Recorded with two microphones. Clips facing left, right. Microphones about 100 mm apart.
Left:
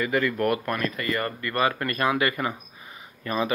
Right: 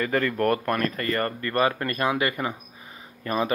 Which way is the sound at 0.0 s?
45° right (ahead or behind).